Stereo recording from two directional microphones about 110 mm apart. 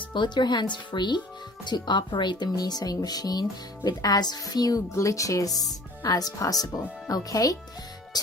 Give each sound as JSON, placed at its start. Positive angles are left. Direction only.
{"t": 0.1, "sound": "speech", "side_deg": 45}